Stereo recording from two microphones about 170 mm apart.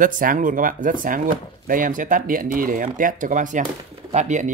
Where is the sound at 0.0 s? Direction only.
55° right (ahead or behind).